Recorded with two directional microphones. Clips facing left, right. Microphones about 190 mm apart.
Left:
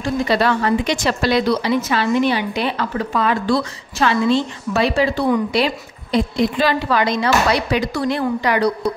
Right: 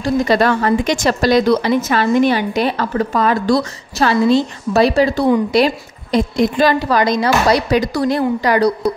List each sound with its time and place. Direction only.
0.0 s a woman's voice: 45° right (ahead or behind)